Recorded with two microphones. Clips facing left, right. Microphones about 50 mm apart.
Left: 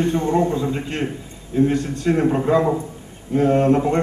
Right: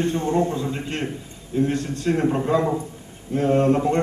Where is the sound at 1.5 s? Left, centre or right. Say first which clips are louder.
Left 4 dB; centre.